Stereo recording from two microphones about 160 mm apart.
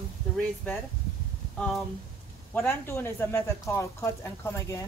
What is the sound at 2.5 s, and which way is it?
A woman's voice, 15° left (ahead or behind).